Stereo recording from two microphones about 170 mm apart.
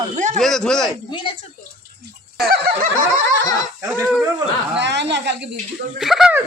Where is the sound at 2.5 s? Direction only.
60° right (ahead or behind).